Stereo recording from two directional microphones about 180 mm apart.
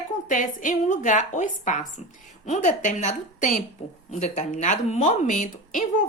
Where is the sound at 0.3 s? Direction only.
45° left (ahead or behind).